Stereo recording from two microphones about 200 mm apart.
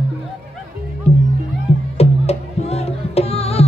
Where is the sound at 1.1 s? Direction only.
30° left (ahead or behind).